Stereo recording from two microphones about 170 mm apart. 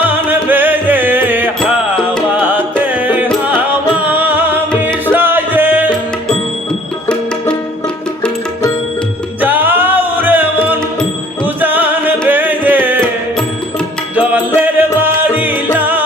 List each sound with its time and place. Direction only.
0.0 s music: 10° right (ahead or behind)
9.4 s music: 10° right (ahead or behind)
14.2 s music: 10° right (ahead or behind)